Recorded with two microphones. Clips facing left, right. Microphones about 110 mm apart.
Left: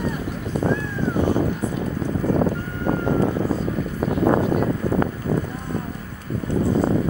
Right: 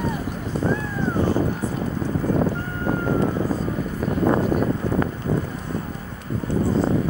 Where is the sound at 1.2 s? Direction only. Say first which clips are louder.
Left 1 dB; 15° left (ahead or behind).